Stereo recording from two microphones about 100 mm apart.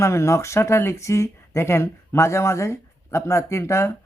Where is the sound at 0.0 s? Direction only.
30° left (ahead or behind).